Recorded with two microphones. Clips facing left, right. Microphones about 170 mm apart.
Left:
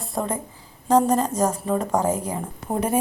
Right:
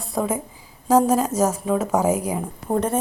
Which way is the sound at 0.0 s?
Centre (ahead or behind).